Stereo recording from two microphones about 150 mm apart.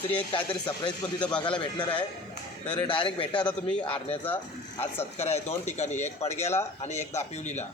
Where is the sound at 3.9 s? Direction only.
40° left (ahead or behind).